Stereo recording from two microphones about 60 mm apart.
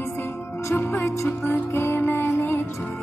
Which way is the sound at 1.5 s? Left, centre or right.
Left.